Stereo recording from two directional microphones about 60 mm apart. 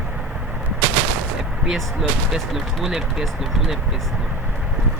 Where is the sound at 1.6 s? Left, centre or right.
Centre.